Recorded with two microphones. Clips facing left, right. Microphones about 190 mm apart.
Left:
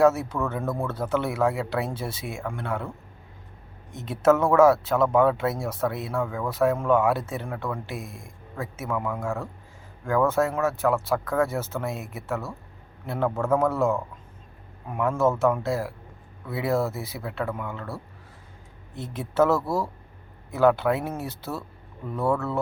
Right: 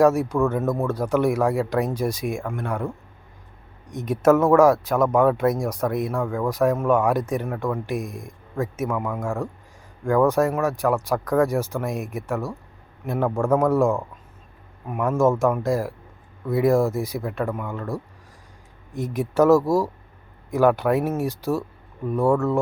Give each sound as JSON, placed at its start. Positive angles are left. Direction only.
{"t": 0.0, "sound": "speech", "side_deg": -15}